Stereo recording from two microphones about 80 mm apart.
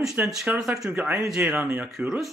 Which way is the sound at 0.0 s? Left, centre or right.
Centre.